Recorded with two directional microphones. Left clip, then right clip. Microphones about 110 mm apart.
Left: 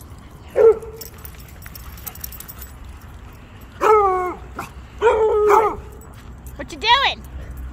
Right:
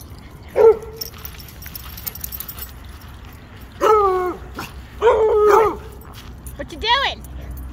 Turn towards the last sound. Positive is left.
turn(degrees=25)  # may be behind; listen again after turning